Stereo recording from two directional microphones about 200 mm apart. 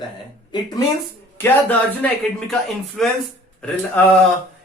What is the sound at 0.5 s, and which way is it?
Speech, 20° left (ahead or behind).